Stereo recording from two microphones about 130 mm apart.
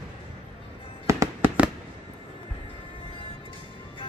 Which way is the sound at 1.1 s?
20° right (ahead or behind).